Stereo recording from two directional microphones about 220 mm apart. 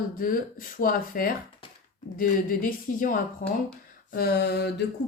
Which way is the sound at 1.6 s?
25° left (ahead or behind).